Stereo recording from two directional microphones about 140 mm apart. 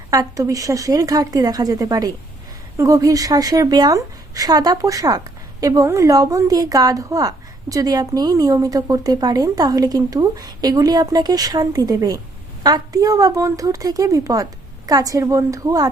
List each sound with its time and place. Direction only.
0.1 s speech: 25° right (ahead or behind)